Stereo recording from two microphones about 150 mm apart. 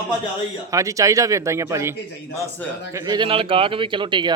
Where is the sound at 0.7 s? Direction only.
20° right (ahead or behind).